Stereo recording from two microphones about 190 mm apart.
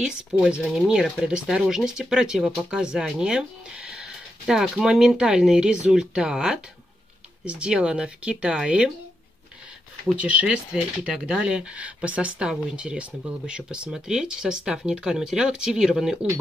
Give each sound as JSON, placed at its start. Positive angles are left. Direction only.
{"t": 0.0, "sound": "speech", "side_deg": -5}
{"t": 10.2, "sound": "speech", "side_deg": -5}